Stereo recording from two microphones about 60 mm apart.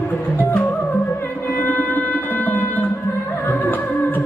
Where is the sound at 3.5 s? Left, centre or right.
Left.